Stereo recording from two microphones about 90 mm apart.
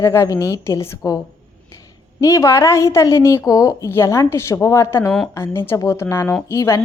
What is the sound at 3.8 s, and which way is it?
A woman's voice, 30° left (ahead or behind).